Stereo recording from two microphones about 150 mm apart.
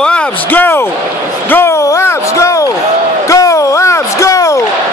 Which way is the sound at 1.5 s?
15° left (ahead or behind).